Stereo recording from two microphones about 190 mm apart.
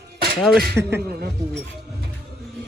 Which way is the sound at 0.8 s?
10° right (ahead or behind).